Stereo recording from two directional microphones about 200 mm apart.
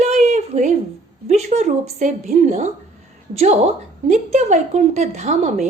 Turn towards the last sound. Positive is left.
turn(degrees=-35)  # may be behind; listen again after turning